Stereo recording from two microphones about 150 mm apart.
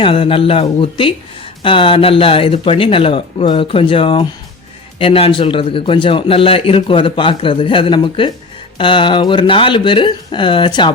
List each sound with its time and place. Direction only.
0.0 s a man's voice: 35° left (ahead or behind)